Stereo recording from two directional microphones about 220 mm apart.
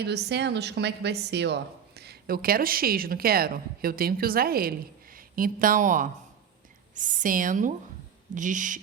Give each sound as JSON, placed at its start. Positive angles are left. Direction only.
{"t": 0.0, "sound": "a woman's voice", "side_deg": -50}